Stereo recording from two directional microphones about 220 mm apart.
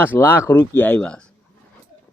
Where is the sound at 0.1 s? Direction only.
10° left (ahead or behind).